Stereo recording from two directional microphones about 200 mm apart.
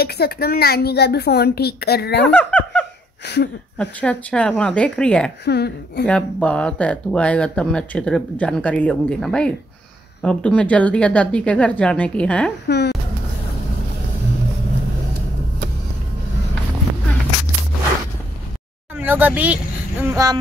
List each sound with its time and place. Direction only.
0.0 s a woman's voice: 50° left (ahead or behind)
2.3 s laughter: 5° left (ahead or behind)
3.7 s speech: 5° left (ahead or behind)
5.4 s a woman's voice: 55° left (ahead or behind)
6.0 s speech: 5° left (ahead or behind)
12.6 s a woman's voice: 55° left (ahead or behind)
18.9 s speech: 10° right (ahead or behind)